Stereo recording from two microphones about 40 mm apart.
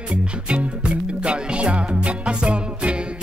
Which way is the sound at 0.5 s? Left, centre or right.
Right.